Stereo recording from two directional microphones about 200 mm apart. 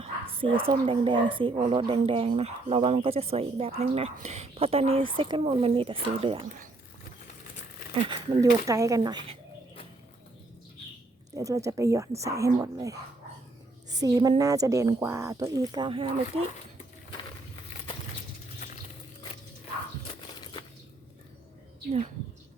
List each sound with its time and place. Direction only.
0.0 s bow-wow: 25° right (ahead or behind)
0.9 s speech: 25° right (ahead or behind)
8.0 s speech: 15° right (ahead or behind)
11.3 s speech: 15° right (ahead or behind)
14.0 s speech: 20° right (ahead or behind)